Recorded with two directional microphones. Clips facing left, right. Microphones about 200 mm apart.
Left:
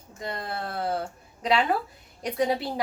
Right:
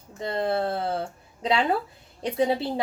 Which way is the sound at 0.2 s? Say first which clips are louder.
Right 8 dB; 30° right (ahead or behind).